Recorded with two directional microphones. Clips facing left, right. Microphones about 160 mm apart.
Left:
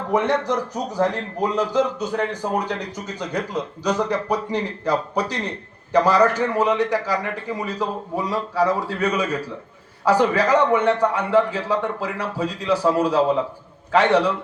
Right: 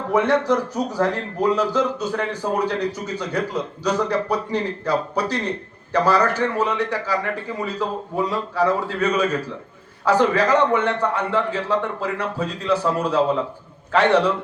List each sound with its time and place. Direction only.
0.1 s a man's voice: 15° left (ahead or behind)